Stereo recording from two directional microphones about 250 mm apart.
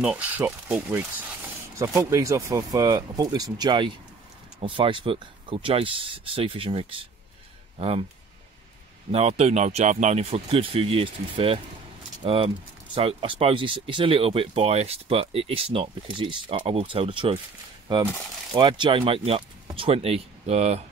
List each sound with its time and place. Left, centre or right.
0.0 s speech: centre; by 7.1 s right
9.1 s speech: right
18.5 s speech: centre